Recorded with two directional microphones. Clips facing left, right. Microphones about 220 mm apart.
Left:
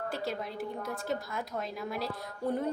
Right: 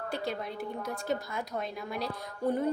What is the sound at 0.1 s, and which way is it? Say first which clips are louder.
A woman's voice: right 1 dB; centre (ahead or behind).